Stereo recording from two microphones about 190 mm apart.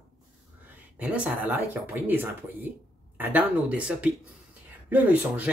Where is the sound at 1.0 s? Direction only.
10° right (ahead or behind).